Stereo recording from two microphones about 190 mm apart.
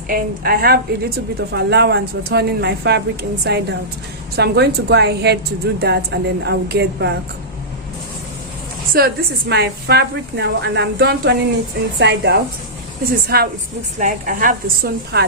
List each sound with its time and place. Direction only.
0.1 s a woman's voice: 50° right (ahead or behind)
8.9 s a woman's voice: 50° right (ahead or behind)